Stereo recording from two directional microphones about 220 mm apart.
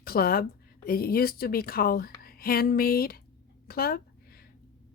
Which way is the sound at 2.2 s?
45° left (ahead or behind).